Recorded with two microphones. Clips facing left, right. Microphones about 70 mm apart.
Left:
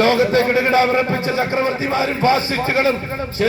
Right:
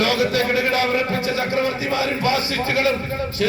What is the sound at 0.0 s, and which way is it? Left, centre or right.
Speech, left.